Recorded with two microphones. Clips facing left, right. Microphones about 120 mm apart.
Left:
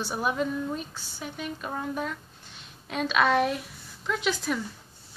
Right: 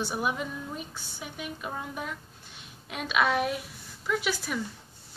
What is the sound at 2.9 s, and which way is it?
A woman's voice, 10° right (ahead or behind).